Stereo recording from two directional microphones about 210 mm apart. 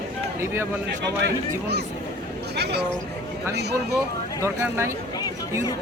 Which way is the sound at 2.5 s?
50° right (ahead or behind).